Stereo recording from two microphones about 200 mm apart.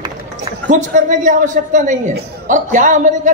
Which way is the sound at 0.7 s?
40° right (ahead or behind).